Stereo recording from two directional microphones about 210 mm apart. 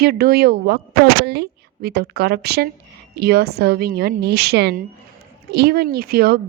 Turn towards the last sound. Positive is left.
turn(degrees=-45)  # may be behind; listen again after turning